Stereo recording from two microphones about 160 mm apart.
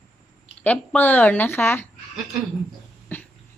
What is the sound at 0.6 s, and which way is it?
Speech, 10° left (ahead or behind).